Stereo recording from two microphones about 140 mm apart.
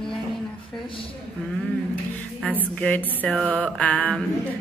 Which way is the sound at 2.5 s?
10° left (ahead or behind).